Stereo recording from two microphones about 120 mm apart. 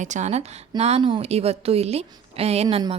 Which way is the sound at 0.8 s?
60° right (ahead or behind).